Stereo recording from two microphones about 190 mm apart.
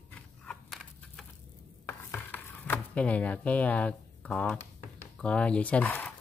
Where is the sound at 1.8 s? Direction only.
10° left (ahead or behind).